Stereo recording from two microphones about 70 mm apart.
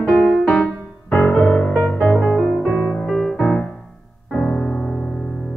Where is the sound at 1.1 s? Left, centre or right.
Left.